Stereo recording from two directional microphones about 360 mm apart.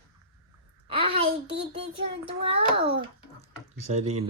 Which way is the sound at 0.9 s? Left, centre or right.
Centre.